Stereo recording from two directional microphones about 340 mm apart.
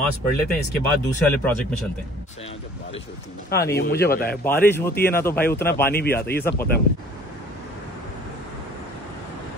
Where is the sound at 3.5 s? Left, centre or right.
Left.